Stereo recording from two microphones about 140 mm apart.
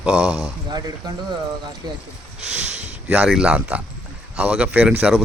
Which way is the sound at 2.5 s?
5° right (ahead or behind).